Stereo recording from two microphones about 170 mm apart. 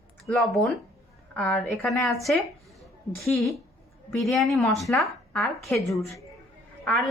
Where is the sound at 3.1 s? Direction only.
15° left (ahead or behind).